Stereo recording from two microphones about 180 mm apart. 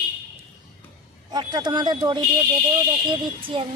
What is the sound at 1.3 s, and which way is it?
Speech, 25° right (ahead or behind).